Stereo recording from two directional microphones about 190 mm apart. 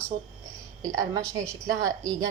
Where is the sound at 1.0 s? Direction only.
15° right (ahead or behind).